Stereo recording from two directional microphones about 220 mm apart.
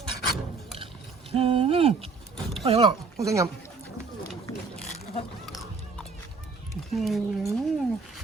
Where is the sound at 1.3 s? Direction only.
25° right (ahead or behind).